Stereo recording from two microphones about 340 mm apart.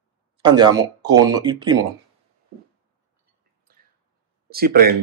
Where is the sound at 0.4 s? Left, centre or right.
Centre.